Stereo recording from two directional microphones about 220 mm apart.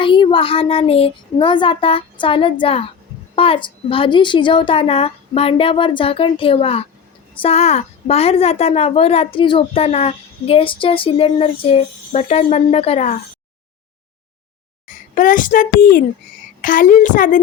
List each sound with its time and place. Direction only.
0.0 s a woman's voice: 25° left (ahead or behind)
14.8 s a child's voice: 35° left (ahead or behind)